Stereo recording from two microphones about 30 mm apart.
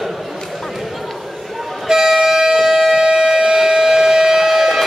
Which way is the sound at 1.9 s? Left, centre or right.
Centre.